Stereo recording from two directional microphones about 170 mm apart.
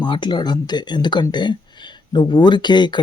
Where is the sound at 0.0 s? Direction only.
25° left (ahead or behind).